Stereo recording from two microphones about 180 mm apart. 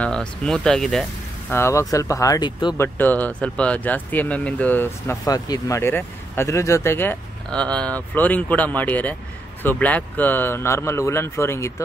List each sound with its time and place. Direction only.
0.0 s speech: 5° left (ahead or behind)
1.5 s speech: 15° left (ahead or behind)
2.8 s speech: 10° left (ahead or behind)